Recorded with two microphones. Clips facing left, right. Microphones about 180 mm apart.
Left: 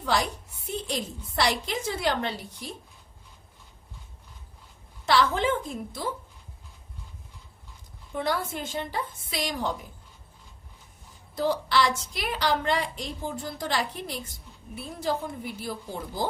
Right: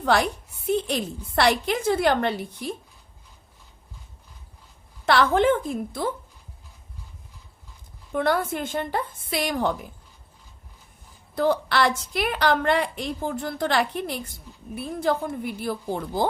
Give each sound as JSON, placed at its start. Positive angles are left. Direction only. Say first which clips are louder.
{"t": 0.0, "sound": "a woman's voice", "louder": "right 5 dB", "side_deg": -60}
{"t": 5.0, "sound": "a woman's voice", "louder": "right 5 dB", "side_deg": -60}
{"t": 8.1, "sound": "a woman's voice", "louder": "right 6 dB", "side_deg": -55}
{"t": 11.3, "sound": "a woman's voice", "louder": "right 3 dB", "side_deg": -55}